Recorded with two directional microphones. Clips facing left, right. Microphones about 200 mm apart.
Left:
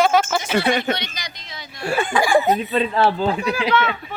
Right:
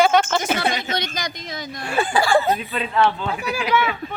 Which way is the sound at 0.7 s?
60° left (ahead or behind).